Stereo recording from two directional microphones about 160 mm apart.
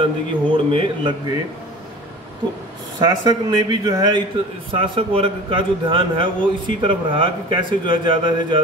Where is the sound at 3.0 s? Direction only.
25° right (ahead or behind).